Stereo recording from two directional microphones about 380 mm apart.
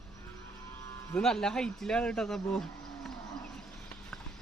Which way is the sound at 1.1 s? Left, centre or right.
Centre.